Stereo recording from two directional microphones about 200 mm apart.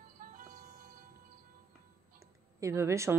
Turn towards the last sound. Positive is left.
turn(degrees=-15)  # may be behind; listen again after turning